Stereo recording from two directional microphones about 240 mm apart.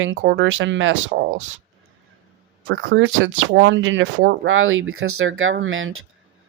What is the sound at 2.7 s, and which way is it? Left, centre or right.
Speech, right.